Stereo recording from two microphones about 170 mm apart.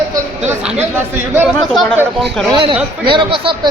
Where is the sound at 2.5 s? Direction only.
30° right (ahead or behind).